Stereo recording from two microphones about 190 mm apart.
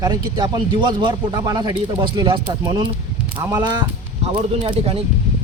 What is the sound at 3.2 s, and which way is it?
A man's voice, 10° right (ahead or behind).